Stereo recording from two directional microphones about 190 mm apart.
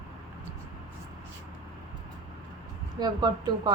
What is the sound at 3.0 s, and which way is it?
Speech, 20° right (ahead or behind).